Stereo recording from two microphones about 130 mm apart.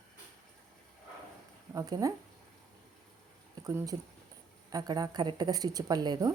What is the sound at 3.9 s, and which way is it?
A woman's voice, 40° right (ahead or behind).